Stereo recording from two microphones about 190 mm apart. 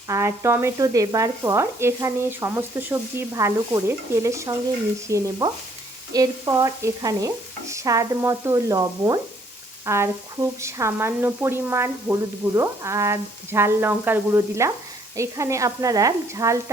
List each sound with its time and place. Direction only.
0.1 s sizzle: 15° right (ahead or behind)